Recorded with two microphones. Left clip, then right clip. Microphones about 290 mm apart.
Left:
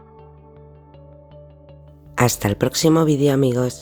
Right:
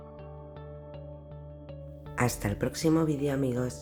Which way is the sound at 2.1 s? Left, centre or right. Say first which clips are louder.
Left 11 dB; left.